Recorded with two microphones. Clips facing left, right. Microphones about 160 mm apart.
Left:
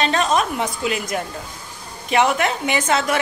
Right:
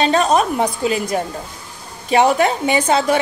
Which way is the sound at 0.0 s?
40° right (ahead or behind).